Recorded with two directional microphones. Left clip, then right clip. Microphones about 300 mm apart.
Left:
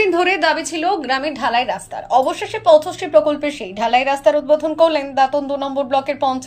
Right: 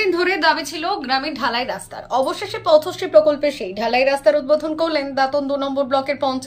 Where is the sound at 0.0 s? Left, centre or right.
Centre.